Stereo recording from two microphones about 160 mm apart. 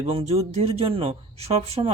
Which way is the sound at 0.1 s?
40° right (ahead or behind).